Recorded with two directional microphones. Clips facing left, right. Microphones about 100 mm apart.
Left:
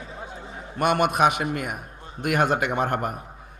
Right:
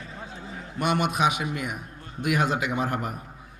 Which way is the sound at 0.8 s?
50° left (ahead or behind).